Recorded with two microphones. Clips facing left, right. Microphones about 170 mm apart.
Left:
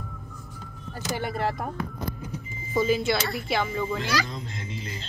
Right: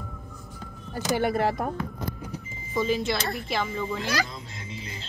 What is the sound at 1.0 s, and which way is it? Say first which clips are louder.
Speech: right 6 dB; 60° right (ahead or behind).